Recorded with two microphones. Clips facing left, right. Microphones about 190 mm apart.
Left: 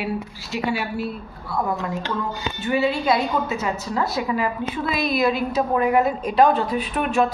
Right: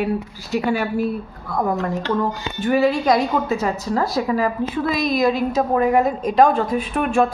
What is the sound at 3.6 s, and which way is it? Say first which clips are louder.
Speech: right 3 dB; 35° right (ahead or behind).